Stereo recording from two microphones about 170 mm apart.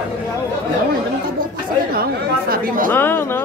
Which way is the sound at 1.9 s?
60° right (ahead or behind).